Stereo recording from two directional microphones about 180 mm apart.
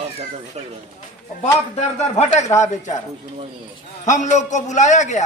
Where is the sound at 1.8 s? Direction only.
40° left (ahead or behind).